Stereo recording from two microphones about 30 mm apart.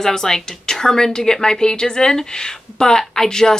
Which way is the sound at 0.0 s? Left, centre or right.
Centre.